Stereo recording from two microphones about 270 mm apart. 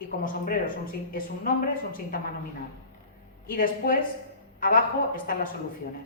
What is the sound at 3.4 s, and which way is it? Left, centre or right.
A woman's voice, left.